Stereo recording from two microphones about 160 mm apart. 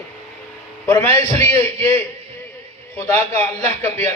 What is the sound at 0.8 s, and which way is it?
A man's voice, 15° left (ahead or behind).